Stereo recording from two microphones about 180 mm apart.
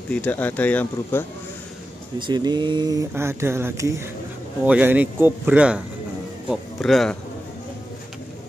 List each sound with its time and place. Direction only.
0.1 s speech: 10° left (ahead or behind)
2.1 s speech: 25° right (ahead or behind); by 7.2 s centre (ahead or behind)